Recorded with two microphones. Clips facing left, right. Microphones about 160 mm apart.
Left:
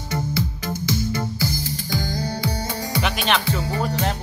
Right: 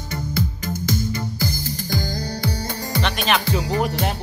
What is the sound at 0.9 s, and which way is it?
Music, 50° right (ahead or behind).